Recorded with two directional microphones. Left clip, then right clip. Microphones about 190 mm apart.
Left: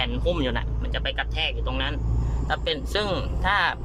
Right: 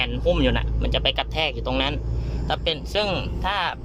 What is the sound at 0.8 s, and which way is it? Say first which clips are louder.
Speech: right 8 dB; 15° right (ahead or behind).